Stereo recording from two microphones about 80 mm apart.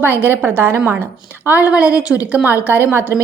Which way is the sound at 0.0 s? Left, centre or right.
Right.